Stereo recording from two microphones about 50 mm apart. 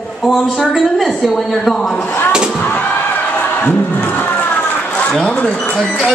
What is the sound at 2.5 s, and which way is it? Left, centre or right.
Music, left.